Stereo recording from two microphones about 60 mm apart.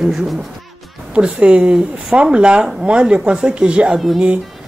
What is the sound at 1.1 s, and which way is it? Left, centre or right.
A woman's voice, centre.